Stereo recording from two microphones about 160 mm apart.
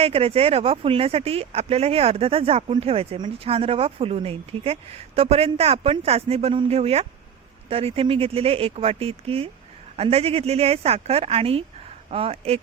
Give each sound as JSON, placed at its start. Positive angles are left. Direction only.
{"t": 0.0, "sound": "speech", "side_deg": -40}